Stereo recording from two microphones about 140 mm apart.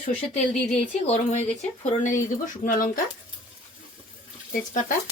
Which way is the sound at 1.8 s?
65° left (ahead or behind).